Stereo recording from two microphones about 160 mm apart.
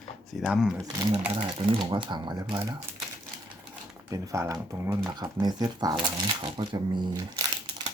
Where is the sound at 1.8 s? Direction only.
30° right (ahead or behind).